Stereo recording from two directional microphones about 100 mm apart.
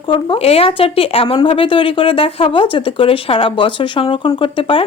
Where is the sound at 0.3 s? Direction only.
80° left.